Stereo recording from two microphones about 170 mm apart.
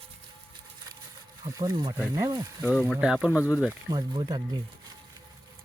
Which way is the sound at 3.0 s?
5° right (ahead or behind).